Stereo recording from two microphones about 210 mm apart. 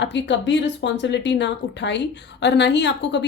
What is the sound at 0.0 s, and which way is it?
Speech, 55° left (ahead or behind).